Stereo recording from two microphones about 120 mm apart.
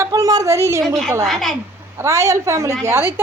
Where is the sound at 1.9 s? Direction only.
25° right (ahead or behind).